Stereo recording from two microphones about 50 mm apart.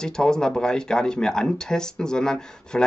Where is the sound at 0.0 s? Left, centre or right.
Centre.